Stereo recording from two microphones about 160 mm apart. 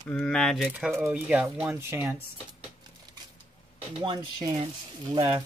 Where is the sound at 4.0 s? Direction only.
30° right (ahead or behind).